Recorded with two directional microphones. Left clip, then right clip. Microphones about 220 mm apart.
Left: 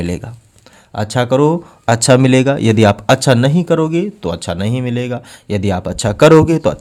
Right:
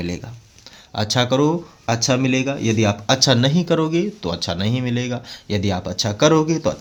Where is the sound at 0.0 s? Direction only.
40° left (ahead or behind).